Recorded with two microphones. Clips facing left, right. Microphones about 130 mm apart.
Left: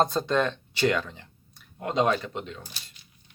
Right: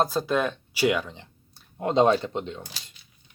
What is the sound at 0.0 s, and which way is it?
Speech, 5° right (ahead or behind).